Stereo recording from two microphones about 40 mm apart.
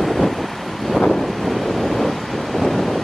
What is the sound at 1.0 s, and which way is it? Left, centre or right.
Thunder, centre.